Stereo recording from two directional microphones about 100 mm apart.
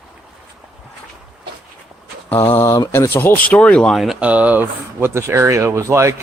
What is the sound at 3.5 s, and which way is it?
Speech, 10° left (ahead or behind).